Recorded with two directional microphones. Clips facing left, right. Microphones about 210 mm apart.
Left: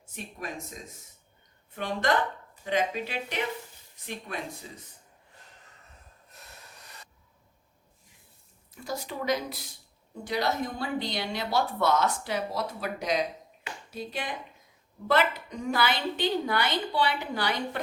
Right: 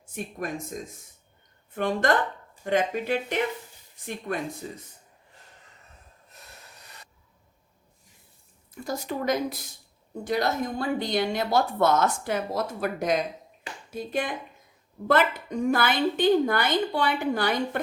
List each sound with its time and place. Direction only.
1.7 s a woman's voice: 50° right (ahead or behind)
8.8 s a woman's voice: 50° right (ahead or behind)